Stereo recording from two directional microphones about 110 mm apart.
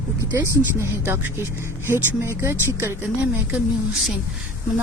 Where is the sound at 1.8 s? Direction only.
25° right (ahead or behind).